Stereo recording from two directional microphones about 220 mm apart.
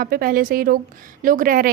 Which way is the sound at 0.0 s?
40° right (ahead or behind).